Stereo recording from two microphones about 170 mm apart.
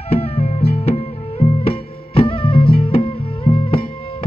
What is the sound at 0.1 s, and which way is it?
Music, 40° left (ahead or behind).